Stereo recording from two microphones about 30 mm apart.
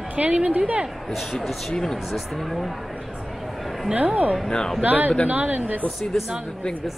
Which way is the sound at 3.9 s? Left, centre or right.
Right.